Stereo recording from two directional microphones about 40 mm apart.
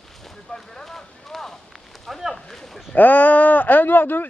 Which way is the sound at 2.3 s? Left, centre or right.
Centre.